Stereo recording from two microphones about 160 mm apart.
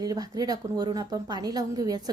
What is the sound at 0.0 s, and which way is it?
A woman's voice, 25° right (ahead or behind).